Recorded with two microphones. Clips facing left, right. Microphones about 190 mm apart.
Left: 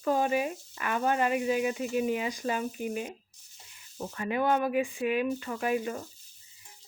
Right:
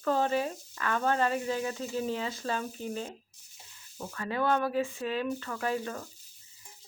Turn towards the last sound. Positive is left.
turn(degrees=15)  # may be behind; listen again after turning